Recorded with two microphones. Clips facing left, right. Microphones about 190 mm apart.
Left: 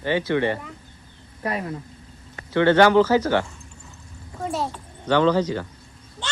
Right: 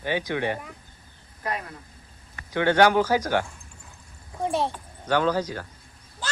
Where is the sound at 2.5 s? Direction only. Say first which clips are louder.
Left 4 dB; 10° right (ahead or behind).